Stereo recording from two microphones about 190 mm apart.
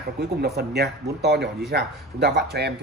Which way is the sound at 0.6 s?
60° right (ahead or behind).